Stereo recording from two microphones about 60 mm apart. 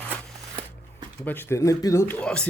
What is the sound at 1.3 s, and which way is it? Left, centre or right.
Speech, left.